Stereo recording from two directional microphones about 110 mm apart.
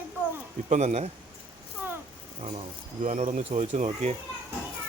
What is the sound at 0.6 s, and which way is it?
Speech, 90° right.